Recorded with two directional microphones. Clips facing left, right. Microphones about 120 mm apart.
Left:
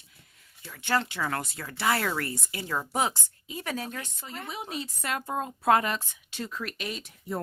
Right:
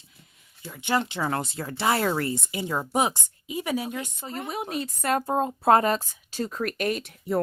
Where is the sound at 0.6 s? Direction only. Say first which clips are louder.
Right 2 dB; 20° right (ahead or behind).